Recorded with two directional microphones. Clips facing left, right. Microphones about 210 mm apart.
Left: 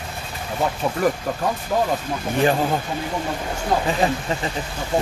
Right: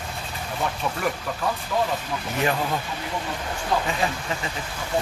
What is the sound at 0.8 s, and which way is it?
Speech, 30° left (ahead or behind).